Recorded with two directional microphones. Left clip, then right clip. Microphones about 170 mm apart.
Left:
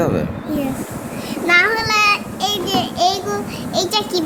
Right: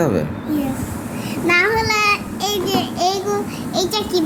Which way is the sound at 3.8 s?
10° left (ahead or behind).